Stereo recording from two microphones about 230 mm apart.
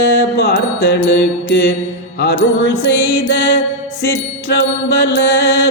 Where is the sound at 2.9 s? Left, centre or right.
Left.